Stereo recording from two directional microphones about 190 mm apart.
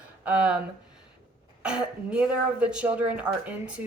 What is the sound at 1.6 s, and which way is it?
Speech, 5° right (ahead or behind).